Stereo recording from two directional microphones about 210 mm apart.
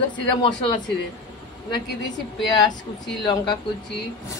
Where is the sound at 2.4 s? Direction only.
20° left (ahead or behind).